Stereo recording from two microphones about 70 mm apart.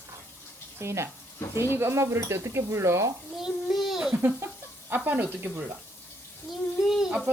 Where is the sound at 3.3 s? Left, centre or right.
Centre.